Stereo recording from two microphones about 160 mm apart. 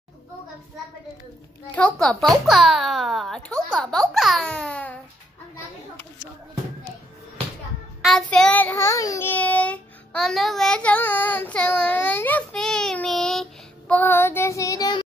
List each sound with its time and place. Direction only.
1.8 s a child's voice: 5° left (ahead or behind)
8.0 s child singing: centre (ahead or behind); by 15.0 s 25° left (ahead or behind)